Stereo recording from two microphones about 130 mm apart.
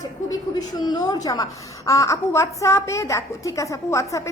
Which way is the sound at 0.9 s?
30° left (ahead or behind).